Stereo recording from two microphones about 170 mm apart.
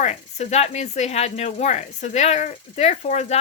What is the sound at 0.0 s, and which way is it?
Speech, 40° left (ahead or behind).